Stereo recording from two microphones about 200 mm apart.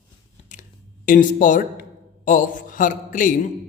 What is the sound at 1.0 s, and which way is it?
A man's voice, 40° left (ahead or behind).